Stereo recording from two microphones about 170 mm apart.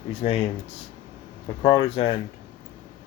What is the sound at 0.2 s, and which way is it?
Speech, 35° left (ahead or behind).